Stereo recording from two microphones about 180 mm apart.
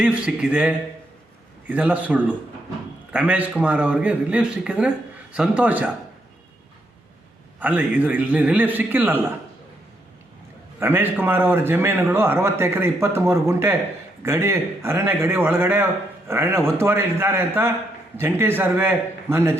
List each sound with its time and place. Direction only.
0.0 s a man's voice: 5° right (ahead or behind)
7.6 s a man's voice: 10° right (ahead or behind)
10.8 s a man's voice: 10° right (ahead or behind)